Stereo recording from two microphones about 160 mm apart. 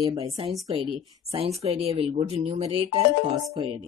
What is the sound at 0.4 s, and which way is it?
Speech, 35° right (ahead or behind).